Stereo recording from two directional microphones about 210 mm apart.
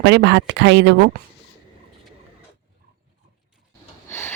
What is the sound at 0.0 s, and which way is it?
Speech, 55° right (ahead or behind).